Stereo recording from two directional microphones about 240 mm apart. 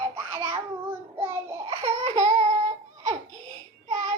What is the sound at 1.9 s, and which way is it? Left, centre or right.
Baby cry, centre.